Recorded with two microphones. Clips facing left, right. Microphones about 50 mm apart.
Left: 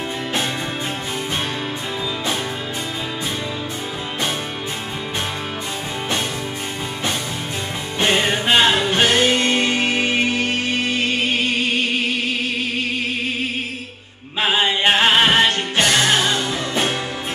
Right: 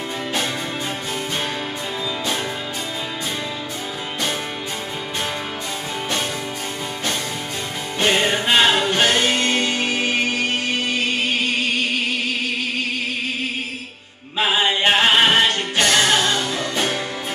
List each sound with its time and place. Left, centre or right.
8.1 s music: centre
9.4 s music: centre
14.7 s music: centre